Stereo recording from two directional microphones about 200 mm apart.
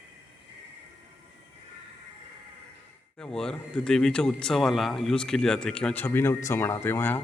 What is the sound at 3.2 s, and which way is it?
Speech, 5° left (ahead or behind).